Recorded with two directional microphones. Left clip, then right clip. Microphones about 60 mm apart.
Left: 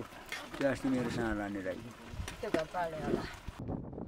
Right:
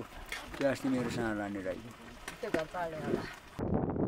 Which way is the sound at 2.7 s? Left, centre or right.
Centre.